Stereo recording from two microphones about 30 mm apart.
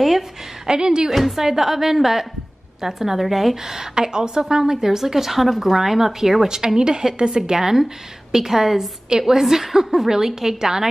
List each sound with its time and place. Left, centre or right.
0.7 s speech: right
1.1 s a woman's voice: centre
3.6 s speech: centre
10.0 s speech: centre